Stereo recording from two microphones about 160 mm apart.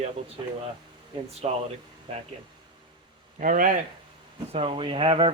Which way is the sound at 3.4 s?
60° right (ahead or behind).